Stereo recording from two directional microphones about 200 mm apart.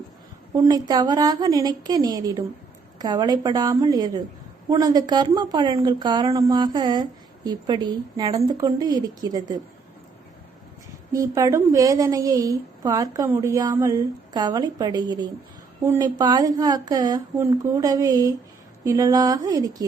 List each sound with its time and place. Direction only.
0.5 s a woman's voice: 20° right (ahead or behind)
11.1 s a woman's voice: 15° right (ahead or behind)